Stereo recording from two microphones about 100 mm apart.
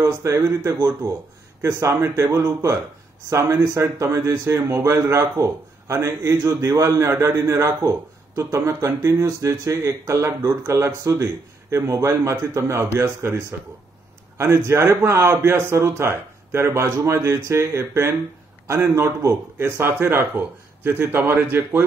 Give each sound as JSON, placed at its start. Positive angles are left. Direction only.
{"t": 0.0, "sound": "speech", "side_deg": -30}